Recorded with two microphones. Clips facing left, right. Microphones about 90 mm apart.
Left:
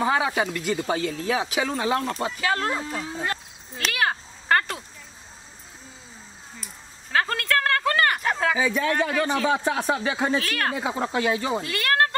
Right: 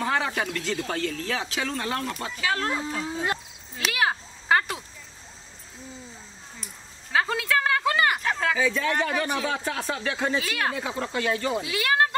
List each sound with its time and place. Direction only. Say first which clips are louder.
0.0 s speech: left 3 dB; 10° left (ahead or behind)
2.3 s speech: right 2 dB; centre (ahead or behind)
3.7 s a sound: even; 5° right (ahead or behind)
6.6 s a sound: left 1 dB; 5° right (ahead or behind)
8.2 s a sound: left 2 dB; 5° left (ahead or behind)
8.5 s speech: left 2 dB; 15° left (ahead or behind)
10.4 s speech: left 1 dB; 5° right (ahead or behind)
10.8 s speech: left 3 dB; 15° left (ahead or behind)
11.6 s speech: even; 5° right (ahead or behind)